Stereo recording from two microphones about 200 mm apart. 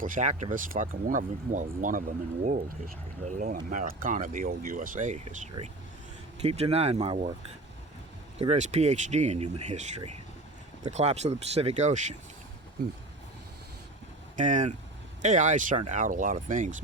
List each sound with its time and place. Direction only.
0.0 s speech: 40° right (ahead or behind)
8.4 s speech: 35° right (ahead or behind)
14.3 s speech: 40° right (ahead or behind)